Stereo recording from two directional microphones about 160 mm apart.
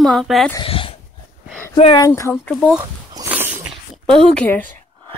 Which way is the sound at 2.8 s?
20° right (ahead or behind).